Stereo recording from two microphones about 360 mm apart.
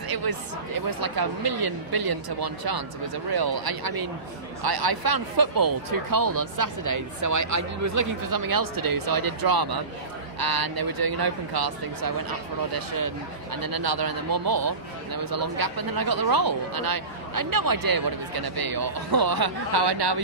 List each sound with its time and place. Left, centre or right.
0.1 s a man's voice: right
4.6 s a man's voice: right